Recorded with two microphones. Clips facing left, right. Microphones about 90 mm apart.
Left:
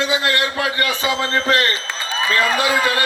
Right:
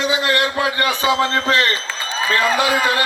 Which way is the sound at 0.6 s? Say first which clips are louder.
Right 2 dB; 25° right (ahead or behind).